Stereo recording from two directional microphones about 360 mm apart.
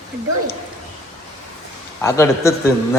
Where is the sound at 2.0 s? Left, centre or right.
Centre.